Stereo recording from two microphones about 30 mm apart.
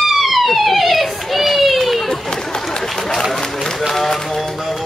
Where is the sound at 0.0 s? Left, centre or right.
Centre.